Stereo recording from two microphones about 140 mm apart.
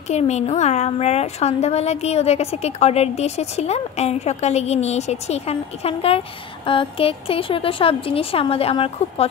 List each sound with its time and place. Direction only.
0.1 s a woman's voice: 55° left (ahead or behind)